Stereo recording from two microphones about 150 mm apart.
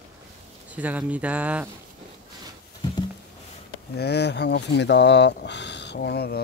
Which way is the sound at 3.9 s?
90° left.